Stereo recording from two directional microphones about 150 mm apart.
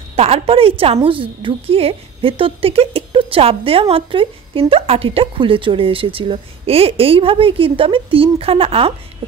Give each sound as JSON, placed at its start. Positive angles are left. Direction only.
{"t": 0.1, "sound": "a woman's voice", "side_deg": -40}